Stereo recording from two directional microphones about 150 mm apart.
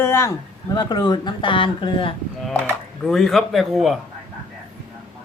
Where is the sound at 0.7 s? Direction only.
30° left (ahead or behind).